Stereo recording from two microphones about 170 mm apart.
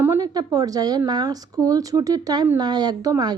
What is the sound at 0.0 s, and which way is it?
A woman's voice, 15° right (ahead or behind).